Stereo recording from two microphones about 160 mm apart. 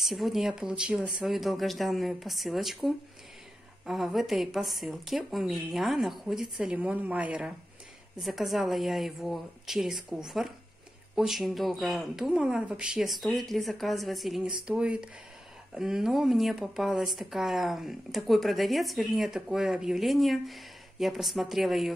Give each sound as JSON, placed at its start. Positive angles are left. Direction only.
{"t": 0.0, "sound": "speech", "side_deg": 0}